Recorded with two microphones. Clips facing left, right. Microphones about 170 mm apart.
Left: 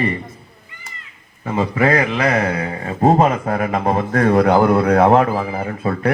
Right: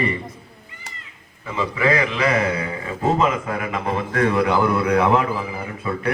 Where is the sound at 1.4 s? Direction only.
45° left (ahead or behind).